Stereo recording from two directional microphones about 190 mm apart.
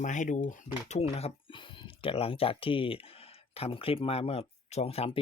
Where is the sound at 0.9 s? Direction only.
35° left (ahead or behind).